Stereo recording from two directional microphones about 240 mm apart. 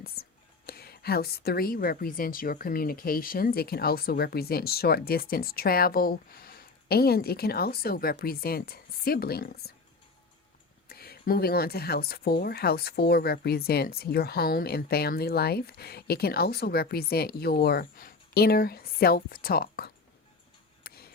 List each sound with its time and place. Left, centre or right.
0.6 s a woman's voice: left
10.8 s a woman's voice: left